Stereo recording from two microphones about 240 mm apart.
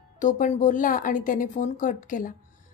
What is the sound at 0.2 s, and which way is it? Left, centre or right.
A woman's voice, left.